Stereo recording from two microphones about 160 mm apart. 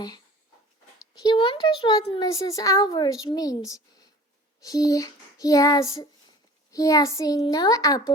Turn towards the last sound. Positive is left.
turn(degrees=20)  # may be behind; listen again after turning